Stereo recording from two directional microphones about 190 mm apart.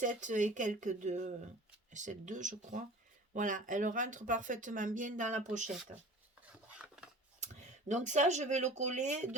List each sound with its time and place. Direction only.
0.0 s speech: 40° right (ahead or behind)
6.5 s filing: 5° right (ahead or behind)
7.3 s speech: 40° right (ahead or behind)